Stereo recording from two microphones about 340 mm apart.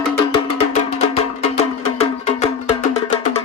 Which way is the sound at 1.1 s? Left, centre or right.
Centre.